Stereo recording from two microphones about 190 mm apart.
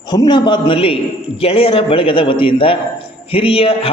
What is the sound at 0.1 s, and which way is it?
A man's voice, 20° left (ahead or behind).